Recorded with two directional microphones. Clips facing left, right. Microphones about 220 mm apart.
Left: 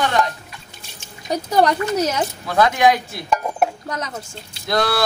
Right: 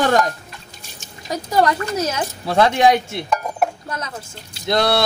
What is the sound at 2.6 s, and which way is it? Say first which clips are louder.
Speech: right 1 dB; 25° right (ahead or behind).